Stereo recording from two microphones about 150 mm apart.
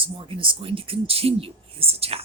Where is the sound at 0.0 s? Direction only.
35° right (ahead or behind).